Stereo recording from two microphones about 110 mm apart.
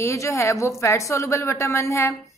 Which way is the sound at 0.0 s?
25° left (ahead or behind).